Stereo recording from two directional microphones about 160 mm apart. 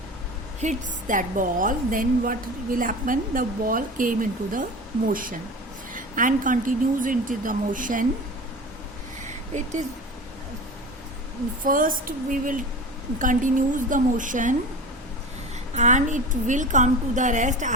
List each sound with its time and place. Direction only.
0.6 s a woman's voice: 50° right (ahead or behind)
5.9 s a woman's voice: 55° right (ahead or behind)
11.6 s a woman's voice: 55° right (ahead or behind)
15.7 s a woman's voice: 50° right (ahead or behind)